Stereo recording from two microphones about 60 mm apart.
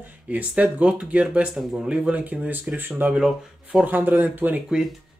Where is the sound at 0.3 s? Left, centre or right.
Right.